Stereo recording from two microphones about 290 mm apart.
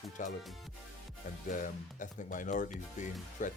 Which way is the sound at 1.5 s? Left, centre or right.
Left.